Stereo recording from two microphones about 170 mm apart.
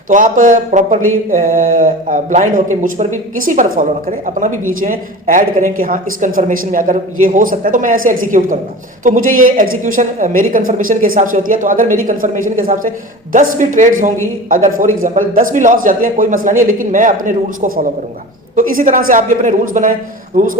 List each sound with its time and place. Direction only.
0.1 s a man's voice: 50° right (ahead or behind)